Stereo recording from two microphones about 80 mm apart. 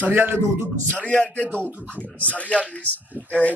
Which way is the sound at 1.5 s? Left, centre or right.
Right.